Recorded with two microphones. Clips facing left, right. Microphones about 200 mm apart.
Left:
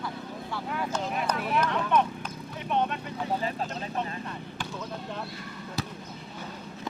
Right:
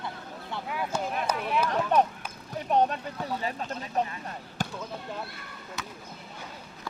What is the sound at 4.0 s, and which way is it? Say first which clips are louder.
Speech: right 5 dB; 40° right (ahead or behind).